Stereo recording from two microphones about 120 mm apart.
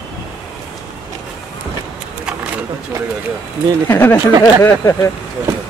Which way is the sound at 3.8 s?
15° left (ahead or behind).